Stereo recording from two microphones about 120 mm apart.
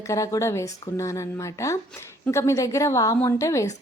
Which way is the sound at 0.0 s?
25° left (ahead or behind).